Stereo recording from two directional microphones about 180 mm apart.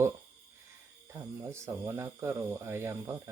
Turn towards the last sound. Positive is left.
turn(degrees=-15)  # may be behind; listen again after turning